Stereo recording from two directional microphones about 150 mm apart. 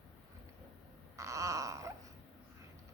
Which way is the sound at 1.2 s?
20° right (ahead or behind).